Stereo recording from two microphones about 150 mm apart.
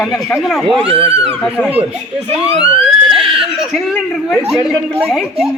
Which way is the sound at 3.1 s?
Centre (ahead or behind).